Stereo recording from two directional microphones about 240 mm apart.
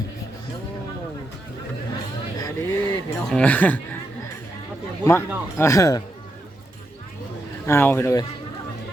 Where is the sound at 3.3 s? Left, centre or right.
Centre.